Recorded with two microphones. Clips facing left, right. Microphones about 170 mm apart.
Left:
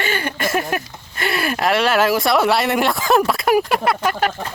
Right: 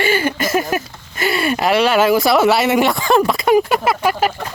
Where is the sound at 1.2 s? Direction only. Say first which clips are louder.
Right 3 dB; centre (ahead or behind).